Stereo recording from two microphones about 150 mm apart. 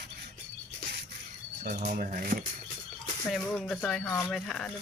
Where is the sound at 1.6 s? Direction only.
60° right (ahead or behind).